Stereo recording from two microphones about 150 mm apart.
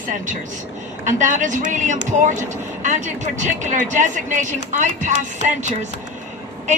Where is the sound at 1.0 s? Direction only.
55° right (ahead or behind).